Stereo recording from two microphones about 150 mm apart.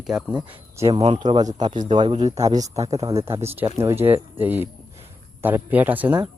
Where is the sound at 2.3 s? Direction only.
20° right (ahead or behind).